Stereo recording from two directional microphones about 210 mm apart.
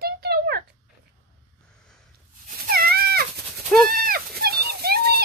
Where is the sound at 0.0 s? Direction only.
50° right (ahead or behind).